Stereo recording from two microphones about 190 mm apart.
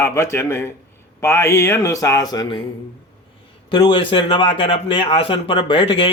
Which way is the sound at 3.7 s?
25° left (ahead or behind).